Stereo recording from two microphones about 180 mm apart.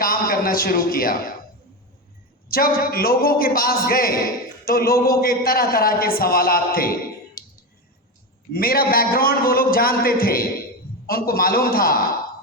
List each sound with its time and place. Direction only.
0.0 s a sound: 55° left (ahead or behind)
2.5 s a man's voice: 55° left (ahead or behind)
8.5 s a man's voice: 55° left (ahead or behind)